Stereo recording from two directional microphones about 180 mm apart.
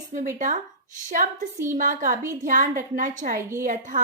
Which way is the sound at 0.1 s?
40° right (ahead or behind).